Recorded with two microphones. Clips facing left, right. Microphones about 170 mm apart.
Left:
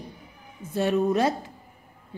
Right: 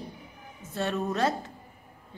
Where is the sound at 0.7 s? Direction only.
15° left (ahead or behind).